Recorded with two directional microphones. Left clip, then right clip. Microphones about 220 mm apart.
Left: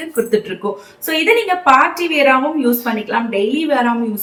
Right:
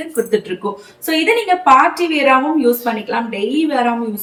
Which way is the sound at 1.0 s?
10° left (ahead or behind).